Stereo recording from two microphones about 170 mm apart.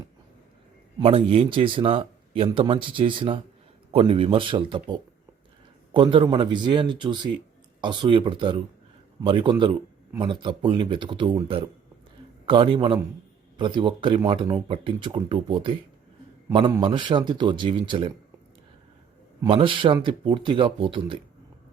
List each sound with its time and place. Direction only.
0.9 s speech: 35° right (ahead or behind)
19.5 s speech: 30° right (ahead or behind)